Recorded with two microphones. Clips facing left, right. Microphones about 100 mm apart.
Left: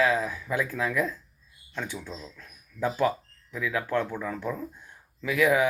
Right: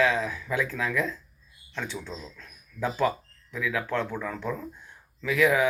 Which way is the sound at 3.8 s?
15° left (ahead or behind).